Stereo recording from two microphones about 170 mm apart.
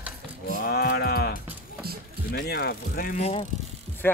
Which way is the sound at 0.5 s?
60° left (ahead or behind).